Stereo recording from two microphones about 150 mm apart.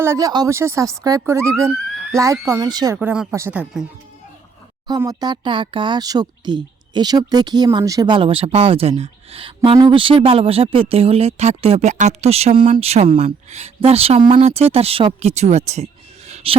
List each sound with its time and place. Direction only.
0.0 s speech: 20° right (ahead or behind)
3.0 s speech: 10° right (ahead or behind)
4.9 s speech: 25° right (ahead or behind); by 16.6 s 45° right (ahead or behind)